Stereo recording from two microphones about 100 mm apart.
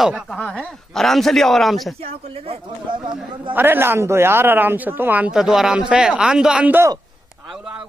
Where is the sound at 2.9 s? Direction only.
55° right (ahead or behind).